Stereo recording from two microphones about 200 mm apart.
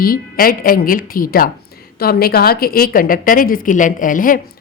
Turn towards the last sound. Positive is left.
turn(degrees=45)  # may be behind; listen again after turning